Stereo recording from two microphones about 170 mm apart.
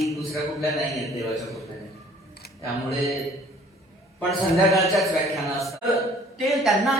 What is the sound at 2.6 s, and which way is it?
Speech, centre (ahead or behind).